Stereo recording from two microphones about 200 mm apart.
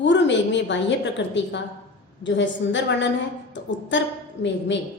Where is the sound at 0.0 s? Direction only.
65° left (ahead or behind).